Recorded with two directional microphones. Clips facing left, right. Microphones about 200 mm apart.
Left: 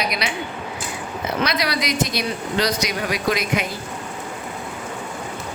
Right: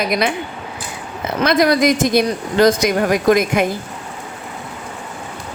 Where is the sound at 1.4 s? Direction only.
50° right (ahead or behind).